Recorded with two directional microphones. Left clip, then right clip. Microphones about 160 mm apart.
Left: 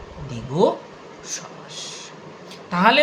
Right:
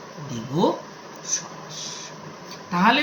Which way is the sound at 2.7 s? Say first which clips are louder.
Left 2 dB; 90° left.